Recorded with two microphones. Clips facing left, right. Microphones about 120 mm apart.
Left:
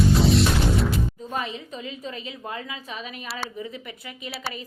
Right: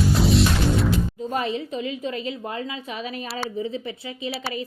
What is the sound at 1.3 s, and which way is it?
A woman's voice, 35° right (ahead or behind).